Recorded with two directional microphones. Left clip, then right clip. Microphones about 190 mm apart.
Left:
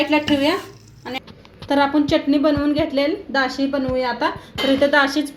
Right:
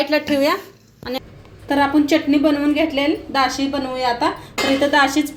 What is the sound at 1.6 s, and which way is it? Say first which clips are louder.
Speech: right 1 dB; 35° left (ahead or behind).